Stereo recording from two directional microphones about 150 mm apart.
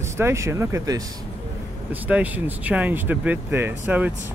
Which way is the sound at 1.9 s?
10° right (ahead or behind).